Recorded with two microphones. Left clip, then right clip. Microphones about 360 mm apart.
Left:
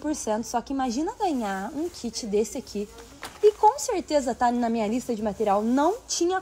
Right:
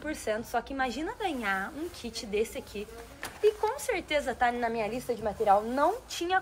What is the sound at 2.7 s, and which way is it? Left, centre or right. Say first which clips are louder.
Speech: left 8 dB; left.